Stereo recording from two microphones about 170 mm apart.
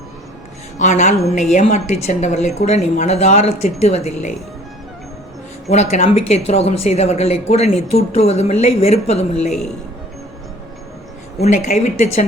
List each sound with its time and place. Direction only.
0.8 s a woman's voice: 45° left (ahead or behind)
5.6 s speech: 40° left (ahead or behind)
11.3 s speech: 40° left (ahead or behind)